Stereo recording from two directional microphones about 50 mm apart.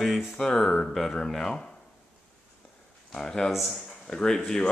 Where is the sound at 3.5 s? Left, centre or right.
Centre.